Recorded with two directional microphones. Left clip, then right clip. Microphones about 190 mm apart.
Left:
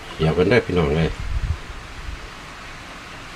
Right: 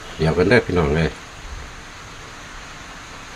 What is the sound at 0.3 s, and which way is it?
Speech, 15° right (ahead or behind).